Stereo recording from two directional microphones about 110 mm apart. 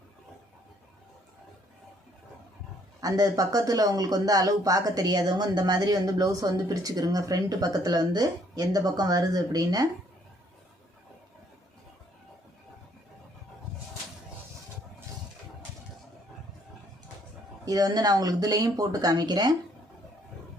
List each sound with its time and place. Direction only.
3.0 s speech: 35° right (ahead or behind)
17.7 s speech: 35° right (ahead or behind)